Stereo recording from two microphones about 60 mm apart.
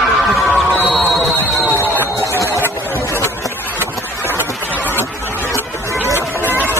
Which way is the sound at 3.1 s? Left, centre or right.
Left.